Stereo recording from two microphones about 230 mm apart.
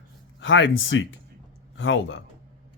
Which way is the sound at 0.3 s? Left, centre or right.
Left.